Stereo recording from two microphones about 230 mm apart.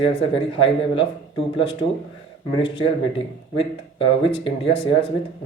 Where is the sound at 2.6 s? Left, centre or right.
Left.